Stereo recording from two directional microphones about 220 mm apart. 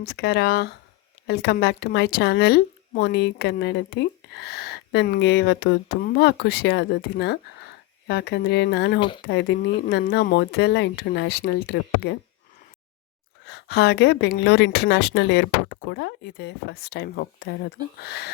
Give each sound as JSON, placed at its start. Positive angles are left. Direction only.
{"t": 0.0, "sound": "a woman's voice", "side_deg": 45}
{"t": 9.0, "sound": "speech", "side_deg": 20}
{"t": 9.2, "sound": "a woman's voice", "side_deg": 50}
{"t": 13.5, "sound": "a woman's voice", "side_deg": 50}